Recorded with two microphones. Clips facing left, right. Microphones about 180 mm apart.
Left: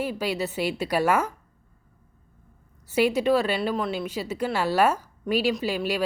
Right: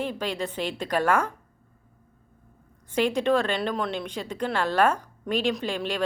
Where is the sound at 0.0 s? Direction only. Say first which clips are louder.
Left 2 dB; 10° left (ahead or behind).